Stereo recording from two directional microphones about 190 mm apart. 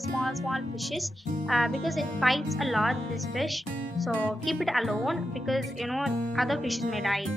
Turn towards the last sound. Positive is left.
turn(degrees=0)  # may be behind; listen again after turning